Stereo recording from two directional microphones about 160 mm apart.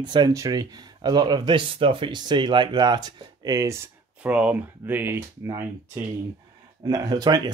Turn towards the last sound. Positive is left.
turn(degrees=-25)  # may be behind; listen again after turning